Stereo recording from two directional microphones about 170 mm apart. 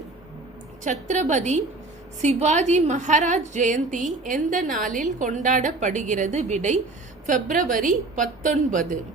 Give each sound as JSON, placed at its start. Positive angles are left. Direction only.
{"t": 0.9, "sound": "a woman's voice", "side_deg": -45}